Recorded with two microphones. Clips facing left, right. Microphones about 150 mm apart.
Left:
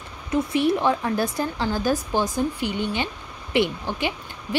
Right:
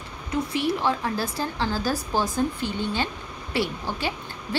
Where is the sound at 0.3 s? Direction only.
20° left (ahead or behind).